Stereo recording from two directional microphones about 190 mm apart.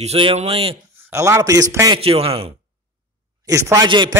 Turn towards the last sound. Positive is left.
turn(degrees=-25)  # may be behind; listen again after turning